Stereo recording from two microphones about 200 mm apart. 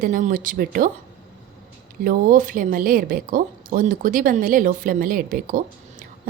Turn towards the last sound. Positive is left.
turn(degrees=-45)  # may be behind; listen again after turning